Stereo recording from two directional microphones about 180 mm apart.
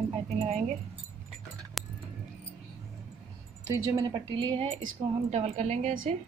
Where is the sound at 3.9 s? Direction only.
25° right (ahead or behind).